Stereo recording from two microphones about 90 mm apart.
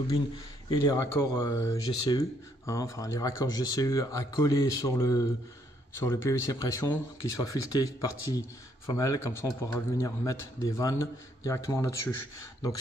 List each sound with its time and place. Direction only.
0.7 s speech: 40° left (ahead or behind)